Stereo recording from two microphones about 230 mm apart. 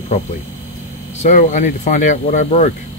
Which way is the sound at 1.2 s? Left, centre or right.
Left.